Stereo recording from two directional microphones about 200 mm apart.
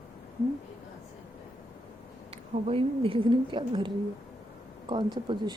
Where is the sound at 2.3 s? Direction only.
30° right (ahead or behind).